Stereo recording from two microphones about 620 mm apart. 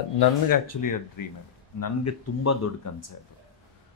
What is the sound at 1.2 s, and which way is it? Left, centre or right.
Speech, left.